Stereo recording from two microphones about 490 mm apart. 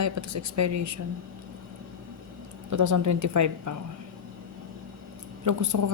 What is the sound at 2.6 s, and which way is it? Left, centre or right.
Speech, right.